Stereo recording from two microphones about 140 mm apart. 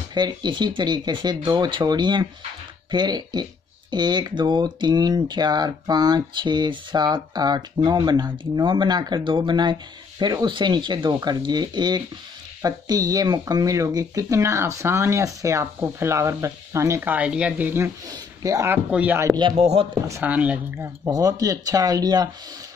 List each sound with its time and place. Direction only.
0.1 s speech: 30° right (ahead or behind)
18.9 s speech: 10° right (ahead or behind)
19.2 s speech: 30° right (ahead or behind)
19.5 s speech: 45° right (ahead or behind)
20.2 s speech: 10° right (ahead or behind)
21.1 s speech: 25° right (ahead or behind)